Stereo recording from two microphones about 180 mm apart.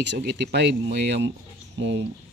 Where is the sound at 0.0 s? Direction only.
70° right (ahead or behind).